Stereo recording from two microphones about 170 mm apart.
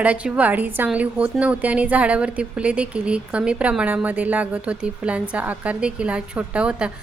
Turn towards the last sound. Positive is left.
turn(degrees=-5)  # may be behind; listen again after turning